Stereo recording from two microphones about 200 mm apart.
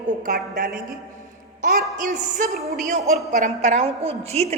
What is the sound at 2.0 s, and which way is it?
A woman's voice, 40° right (ahead or behind).